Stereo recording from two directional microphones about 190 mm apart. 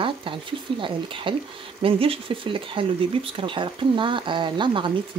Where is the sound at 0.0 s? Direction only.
25° right (ahead or behind).